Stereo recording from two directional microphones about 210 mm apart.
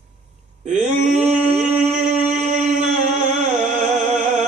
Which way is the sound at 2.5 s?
35° right (ahead or behind).